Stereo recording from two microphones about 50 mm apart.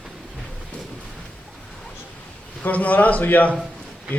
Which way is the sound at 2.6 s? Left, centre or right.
Left.